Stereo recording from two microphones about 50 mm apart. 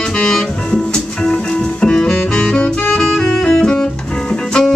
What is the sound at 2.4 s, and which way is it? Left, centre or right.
Saxophone, left.